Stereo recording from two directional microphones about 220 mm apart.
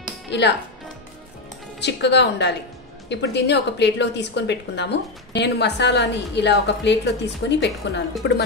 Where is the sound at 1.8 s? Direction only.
50° left (ahead or behind).